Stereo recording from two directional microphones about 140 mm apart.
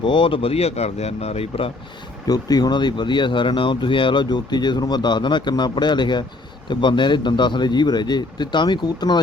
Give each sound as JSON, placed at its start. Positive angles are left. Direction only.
{"t": 0.0, "sound": "speech", "side_deg": 35}
{"t": 2.2, "sound": "speech", "side_deg": 30}